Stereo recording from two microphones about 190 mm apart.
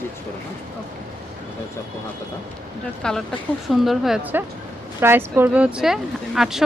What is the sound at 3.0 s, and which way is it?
Speech, 5° left (ahead or behind).